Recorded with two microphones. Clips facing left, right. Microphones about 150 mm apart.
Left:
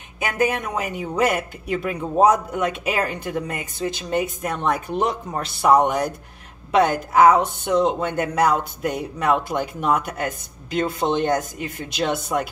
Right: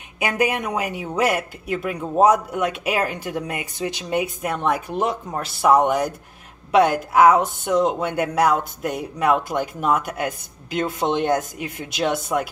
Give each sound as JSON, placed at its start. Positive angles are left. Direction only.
{"t": 0.2, "sound": "speech", "side_deg": -10}